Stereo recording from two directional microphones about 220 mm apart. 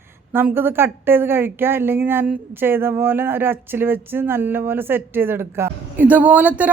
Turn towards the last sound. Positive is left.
turn(degrees=-5)  # may be behind; listen again after turning